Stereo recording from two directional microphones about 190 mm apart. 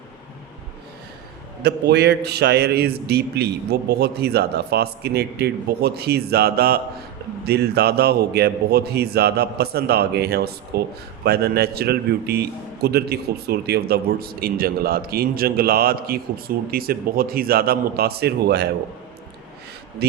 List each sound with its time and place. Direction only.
1.6 s a man's voice: 60° right (ahead or behind)
20.0 s speech: 60° right (ahead or behind)